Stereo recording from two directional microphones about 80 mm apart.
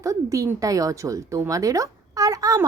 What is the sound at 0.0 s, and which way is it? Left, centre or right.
A woman's voice, right.